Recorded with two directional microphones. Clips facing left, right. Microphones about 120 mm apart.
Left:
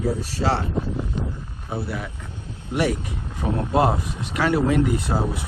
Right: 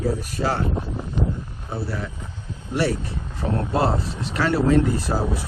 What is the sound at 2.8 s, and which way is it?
Speech, 15° left (ahead or behind).